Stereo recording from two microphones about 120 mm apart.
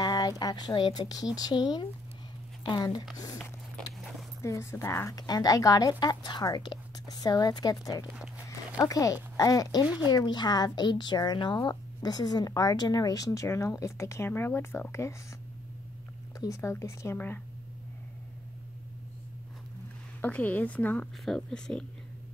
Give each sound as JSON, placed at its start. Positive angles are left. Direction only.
{"t": 0.0, "sound": "a sound", "side_deg": 35}
{"t": 0.4, "sound": "a woman's voice", "side_deg": 35}
{"t": 4.4, "sound": "a woman's voice", "side_deg": 25}
{"t": 16.3, "sound": "speech", "side_deg": 25}
{"t": 20.2, "sound": "a woman's voice", "side_deg": 15}